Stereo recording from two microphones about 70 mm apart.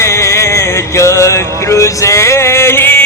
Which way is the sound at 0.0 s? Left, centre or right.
Left.